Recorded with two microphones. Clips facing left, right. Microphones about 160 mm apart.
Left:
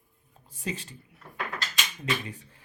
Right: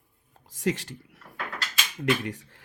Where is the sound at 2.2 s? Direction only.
85° right.